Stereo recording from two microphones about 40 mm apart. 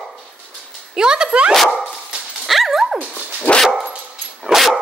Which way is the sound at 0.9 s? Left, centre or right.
Centre.